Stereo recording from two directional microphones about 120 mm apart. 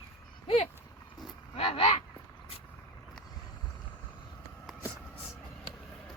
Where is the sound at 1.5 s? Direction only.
55° left (ahead or behind).